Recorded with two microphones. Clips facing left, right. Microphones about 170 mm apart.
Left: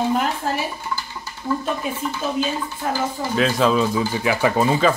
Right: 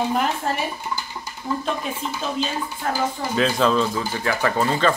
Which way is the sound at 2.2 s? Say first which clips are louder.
Left 4 dB; 10° left (ahead or behind).